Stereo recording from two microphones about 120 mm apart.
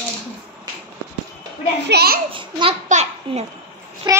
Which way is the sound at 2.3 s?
45° right (ahead or behind).